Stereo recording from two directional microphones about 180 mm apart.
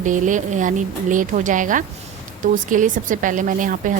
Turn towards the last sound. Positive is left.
turn(degrees=-45)  # may be behind; listen again after turning